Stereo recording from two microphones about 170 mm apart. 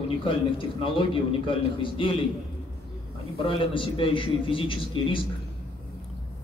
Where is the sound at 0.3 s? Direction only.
30° left (ahead or behind).